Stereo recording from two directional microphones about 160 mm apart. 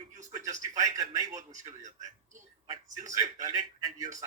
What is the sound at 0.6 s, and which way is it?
Speech, 20° right (ahead or behind).